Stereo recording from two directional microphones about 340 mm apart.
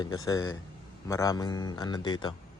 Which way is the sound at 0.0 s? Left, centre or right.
Centre.